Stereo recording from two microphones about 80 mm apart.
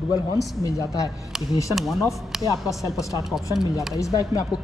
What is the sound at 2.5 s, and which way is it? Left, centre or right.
Speech, left.